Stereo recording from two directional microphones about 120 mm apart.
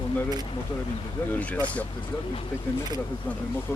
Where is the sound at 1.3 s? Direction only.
10° left (ahead or behind).